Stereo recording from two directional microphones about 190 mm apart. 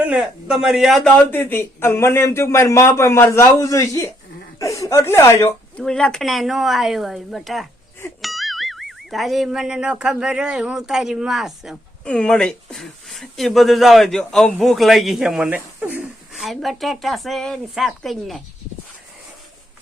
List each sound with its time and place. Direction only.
0.0 s a man's voice: 5° right (ahead or behind); by 5.8 s 15° left (ahead or behind)
5.8 s speech: 5° left (ahead or behind)